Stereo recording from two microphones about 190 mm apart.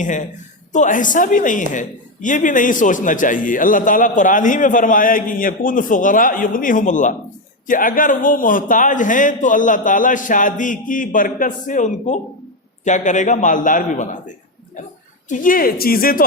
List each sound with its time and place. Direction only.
0.0 s a man's voice: 40° left (ahead or behind)